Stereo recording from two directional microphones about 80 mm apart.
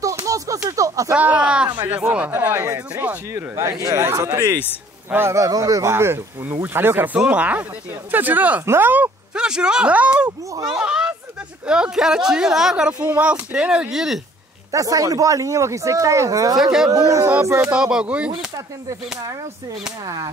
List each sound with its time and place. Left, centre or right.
0.0 s a sound: right
1.1 s speech: centre
2.3 s a child's voice: right; by 14.2 s centre
14.7 s speech: right
16.5 s speech: centre
16.9 s speech: right
17.6 s speech: centre